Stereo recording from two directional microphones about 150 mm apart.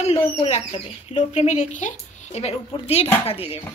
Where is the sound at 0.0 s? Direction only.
45° left (ahead or behind).